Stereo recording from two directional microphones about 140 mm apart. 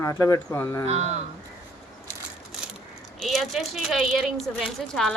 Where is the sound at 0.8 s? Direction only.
50° right (ahead or behind).